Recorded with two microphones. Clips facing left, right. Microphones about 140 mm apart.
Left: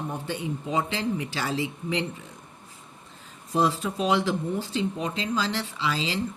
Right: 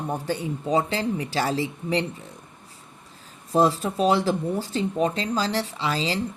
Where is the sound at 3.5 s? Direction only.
35° right (ahead or behind).